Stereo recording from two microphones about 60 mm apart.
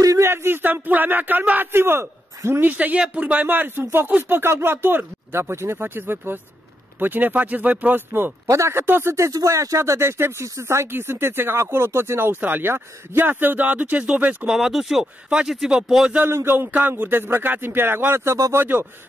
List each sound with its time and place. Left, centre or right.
0.2 s speech: right
1.7 s a man's voice: right
2.6 s speech: right
8.5 s speech: right
9.1 s speech: right
14.5 s speech: centre
15.2 s speech: centre
15.5 s speech: centre
16.3 s speech: right
18.5 s speech: right